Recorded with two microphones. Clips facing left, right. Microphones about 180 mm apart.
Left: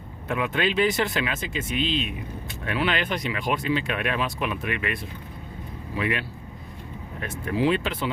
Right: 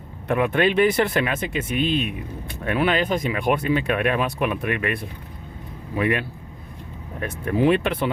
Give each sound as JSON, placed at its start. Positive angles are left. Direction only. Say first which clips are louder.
{"t": 0.3, "sound": "speech", "louder": "right 6 dB", "side_deg": -55}
{"t": 6.0, "sound": "speech", "louder": "right 5 dB", "side_deg": -50}